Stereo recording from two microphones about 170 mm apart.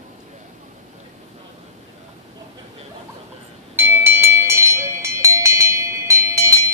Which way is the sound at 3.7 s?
15° right (ahead or behind).